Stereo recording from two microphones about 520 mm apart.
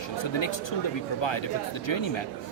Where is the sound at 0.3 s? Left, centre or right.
Left.